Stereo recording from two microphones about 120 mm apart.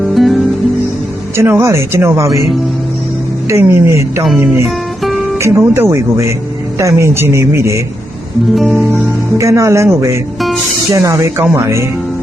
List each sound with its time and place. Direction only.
0.1 s music: centre (ahead or behind)
1.4 s speech: 20° right (ahead or behind)
3.5 s speech: 25° right (ahead or behind)
5.4 s speech: 25° right (ahead or behind)
8.4 s music: centre (ahead or behind)
9.4 s speech: 25° right (ahead or behind)